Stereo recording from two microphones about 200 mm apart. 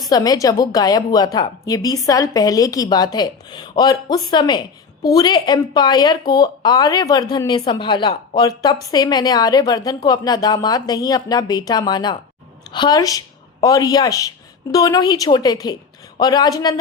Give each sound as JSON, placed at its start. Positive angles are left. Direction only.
{"t": 0.1, "sound": "a woman's voice", "side_deg": 20}